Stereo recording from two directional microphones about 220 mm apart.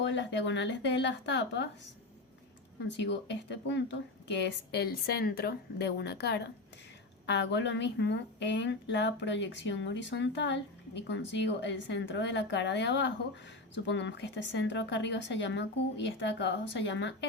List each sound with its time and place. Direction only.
0.0 s speech: 55° left (ahead or behind)
3.0 s speech: 55° left (ahead or behind)